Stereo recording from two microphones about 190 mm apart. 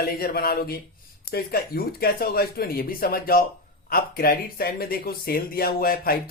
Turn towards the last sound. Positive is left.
turn(degrees=50)  # may be behind; listen again after turning